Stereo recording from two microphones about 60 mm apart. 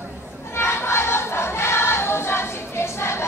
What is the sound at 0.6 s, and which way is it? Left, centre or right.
Music, left.